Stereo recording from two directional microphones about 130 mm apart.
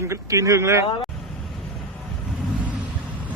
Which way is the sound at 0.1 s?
25° right (ahead or behind).